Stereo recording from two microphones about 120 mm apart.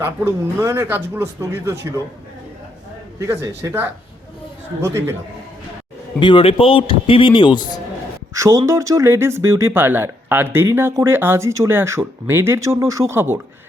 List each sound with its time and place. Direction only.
0.0 s speech: 25° right (ahead or behind)
3.2 s speech: 25° right (ahead or behind)
6.1 s a man's voice: 45° left (ahead or behind)
8.3 s speech: 25° right (ahead or behind)